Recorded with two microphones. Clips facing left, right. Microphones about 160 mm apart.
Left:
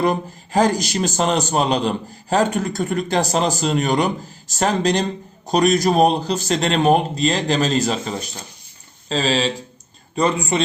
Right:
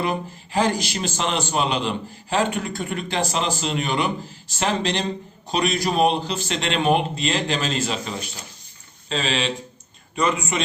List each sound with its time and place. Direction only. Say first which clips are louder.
0.0 s a man's voice: left 5 dB; 40° left (ahead or behind)